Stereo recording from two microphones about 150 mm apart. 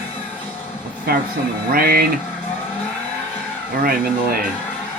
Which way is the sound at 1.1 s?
80° right.